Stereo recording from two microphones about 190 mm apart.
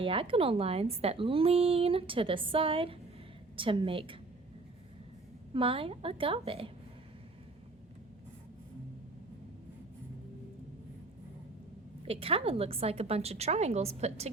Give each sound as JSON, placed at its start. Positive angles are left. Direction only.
{"t": 0.0, "sound": "a woman's voice", "side_deg": -30}
{"t": 5.5, "sound": "a woman's voice", "side_deg": -30}
{"t": 12.0, "sound": "a woman's voice", "side_deg": -30}